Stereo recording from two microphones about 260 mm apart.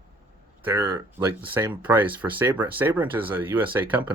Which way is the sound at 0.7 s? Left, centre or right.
Centre.